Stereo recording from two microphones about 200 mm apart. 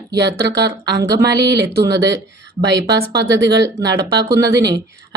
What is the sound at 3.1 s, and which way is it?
Speech, 20° right (ahead or behind).